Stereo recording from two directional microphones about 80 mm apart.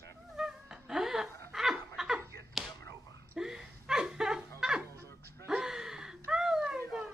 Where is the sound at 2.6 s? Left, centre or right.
Centre.